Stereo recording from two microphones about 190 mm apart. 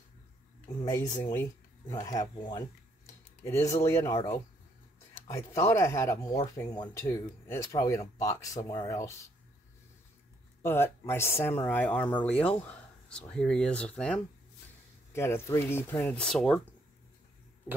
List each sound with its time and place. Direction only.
0.8 s speech: 20° left (ahead or behind)
10.6 s speech: 10° left (ahead or behind)